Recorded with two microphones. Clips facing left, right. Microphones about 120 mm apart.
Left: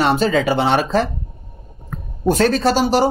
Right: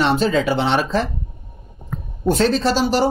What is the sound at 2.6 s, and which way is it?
Speech, 50° left (ahead or behind).